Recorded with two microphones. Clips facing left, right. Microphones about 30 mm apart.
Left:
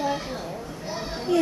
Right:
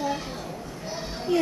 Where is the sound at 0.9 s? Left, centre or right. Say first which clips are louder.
Left 2 dB; centre.